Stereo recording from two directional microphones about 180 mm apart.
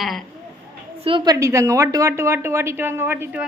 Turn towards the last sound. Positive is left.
turn(degrees=-10)  # may be behind; listen again after turning